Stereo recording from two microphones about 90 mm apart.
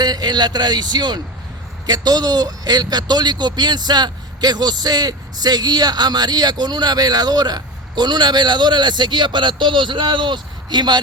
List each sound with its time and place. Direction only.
0.0 s speech: 50° right (ahead or behind)